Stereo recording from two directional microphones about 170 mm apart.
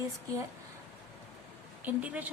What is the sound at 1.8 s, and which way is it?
Speech, 10° right (ahead or behind).